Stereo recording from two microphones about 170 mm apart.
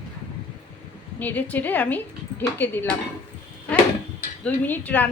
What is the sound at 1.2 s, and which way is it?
A woman's voice, 10° left (ahead or behind).